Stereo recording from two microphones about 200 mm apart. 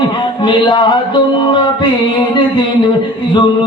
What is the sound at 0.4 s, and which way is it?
A man's voice, 25° left (ahead or behind).